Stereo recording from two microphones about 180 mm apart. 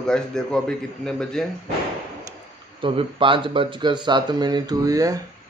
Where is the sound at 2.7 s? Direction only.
30° right (ahead or behind).